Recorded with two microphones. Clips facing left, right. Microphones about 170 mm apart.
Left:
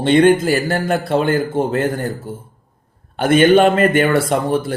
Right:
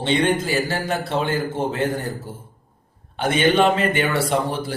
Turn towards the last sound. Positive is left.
turn(degrees=50)  # may be behind; listen again after turning